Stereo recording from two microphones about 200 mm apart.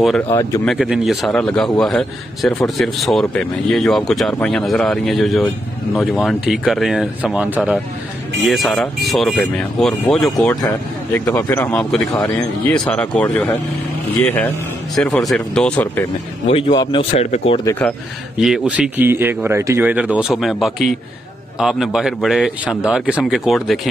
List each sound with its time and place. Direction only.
0.3 s speech: 15° left (ahead or behind)
0.7 s a man's voice: centre (ahead or behind)
10.5 s a man's voice: 15° left (ahead or behind)
15.0 s a man's voice: centre (ahead or behind)
16.4 s speech: 25° left (ahead or behind)
17.6 s speech: 10° left (ahead or behind)
18.4 s a man's voice: centre (ahead or behind)